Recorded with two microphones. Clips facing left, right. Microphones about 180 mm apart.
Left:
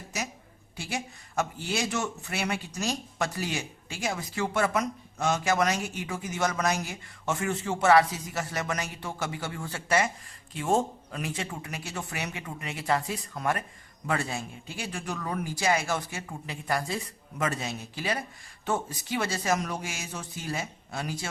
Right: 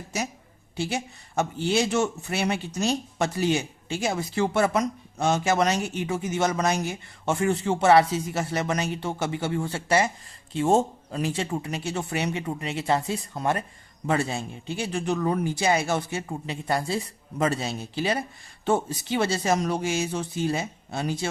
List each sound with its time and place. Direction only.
0.8 s speech: 25° right (ahead or behind)